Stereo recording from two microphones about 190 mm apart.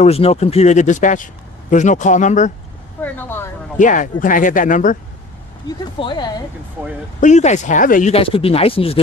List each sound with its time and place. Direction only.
0.0 s a man's voice: 35° left (ahead or behind)
3.0 s speech: 10° left (ahead or behind)
3.7 s speech: 40° left (ahead or behind)
5.7 s speech: 25° left (ahead or behind)
7.2 s a man's voice: 40° left (ahead or behind)
8.1 s speech: 30° left (ahead or behind)